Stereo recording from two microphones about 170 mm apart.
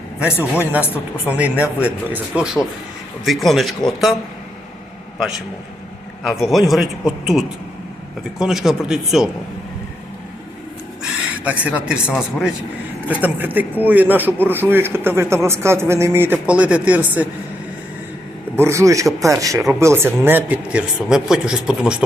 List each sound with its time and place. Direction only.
0.2 s a man's voice: 5° right (ahead or behind)
6.2 s a man's voice: centre (ahead or behind)
11.4 s speech: 10° right (ahead or behind)
18.5 s a man's voice: 15° right (ahead or behind)